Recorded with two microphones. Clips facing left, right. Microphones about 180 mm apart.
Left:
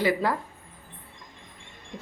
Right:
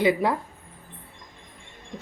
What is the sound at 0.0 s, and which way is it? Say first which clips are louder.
Speech: right 3 dB; 20° right (ahead or behind).